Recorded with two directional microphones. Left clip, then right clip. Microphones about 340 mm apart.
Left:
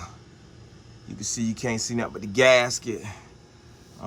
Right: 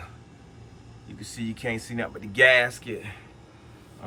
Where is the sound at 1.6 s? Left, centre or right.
Centre.